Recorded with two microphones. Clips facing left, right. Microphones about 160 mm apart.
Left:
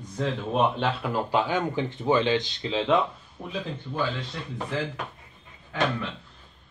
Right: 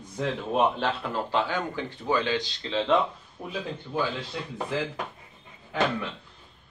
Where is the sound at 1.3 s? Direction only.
20° left (ahead or behind).